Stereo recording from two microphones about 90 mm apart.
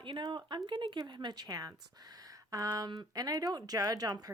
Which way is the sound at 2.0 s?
45° right (ahead or behind).